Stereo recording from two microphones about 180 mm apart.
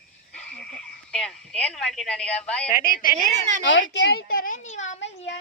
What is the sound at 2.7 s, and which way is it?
Speech, 50° left (ahead or behind).